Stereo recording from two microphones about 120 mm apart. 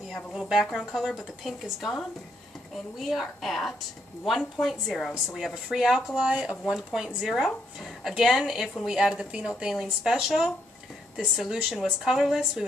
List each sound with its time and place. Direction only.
0.1 s a woman's voice: centre (ahead or behind)